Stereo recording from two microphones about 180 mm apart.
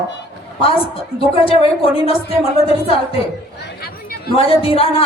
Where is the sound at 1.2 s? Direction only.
30° left (ahead or behind).